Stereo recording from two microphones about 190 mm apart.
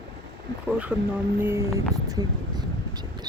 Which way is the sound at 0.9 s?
5° right (ahead or behind).